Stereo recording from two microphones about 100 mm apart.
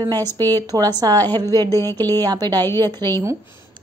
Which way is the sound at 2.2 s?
40° right (ahead or behind).